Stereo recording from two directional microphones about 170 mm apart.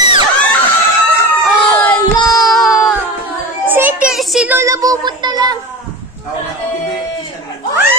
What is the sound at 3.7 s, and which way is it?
Child singing, 10° right (ahead or behind).